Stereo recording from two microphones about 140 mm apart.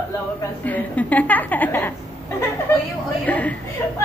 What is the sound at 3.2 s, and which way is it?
Speech, 10° left (ahead or behind).